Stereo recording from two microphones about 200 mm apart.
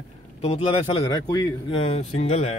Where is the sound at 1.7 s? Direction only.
30° left (ahead or behind).